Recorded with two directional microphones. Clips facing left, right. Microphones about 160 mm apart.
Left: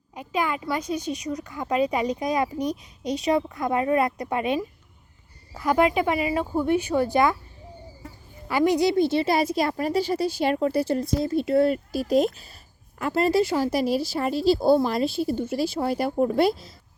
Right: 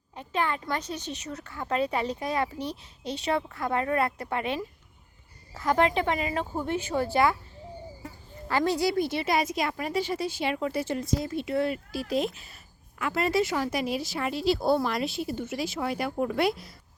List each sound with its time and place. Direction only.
0.1 s a woman's voice: 10° left (ahead or behind)
8.4 s a woman's voice: 15° left (ahead or behind); by 16.7 s 30° left (ahead or behind)